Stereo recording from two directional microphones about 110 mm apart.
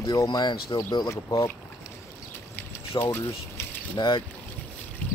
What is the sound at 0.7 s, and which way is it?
Speech, 45° left (ahead or behind).